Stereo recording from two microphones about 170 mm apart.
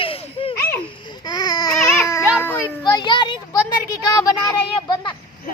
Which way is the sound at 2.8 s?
25° left (ahead or behind).